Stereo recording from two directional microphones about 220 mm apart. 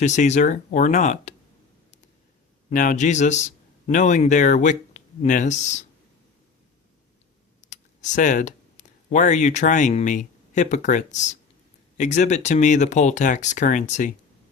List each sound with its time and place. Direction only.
0.0 s speech: 30° left (ahead or behind)
2.6 s a man's voice: 35° left (ahead or behind)
7.6 s speech: 35° left (ahead or behind)